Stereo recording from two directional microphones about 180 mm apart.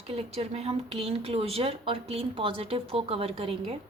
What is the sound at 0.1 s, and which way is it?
A woman's voice, 35° right (ahead or behind).